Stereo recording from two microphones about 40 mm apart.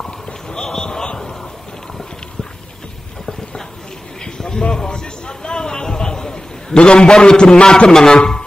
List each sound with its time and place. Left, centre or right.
0.0 s run: centre
4.2 s a sound: centre
7.6 s speech: centre